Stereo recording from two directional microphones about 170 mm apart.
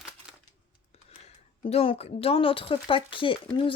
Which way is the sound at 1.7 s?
35° left (ahead or behind).